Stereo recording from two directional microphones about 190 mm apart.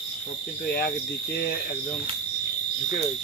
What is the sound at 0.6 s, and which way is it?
Cricket, 55° left (ahead or behind).